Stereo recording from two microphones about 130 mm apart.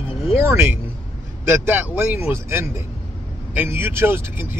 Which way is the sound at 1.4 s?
15° right (ahead or behind).